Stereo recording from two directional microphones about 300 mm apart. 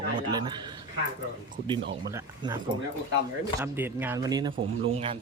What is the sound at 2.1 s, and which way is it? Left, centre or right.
Speech, centre.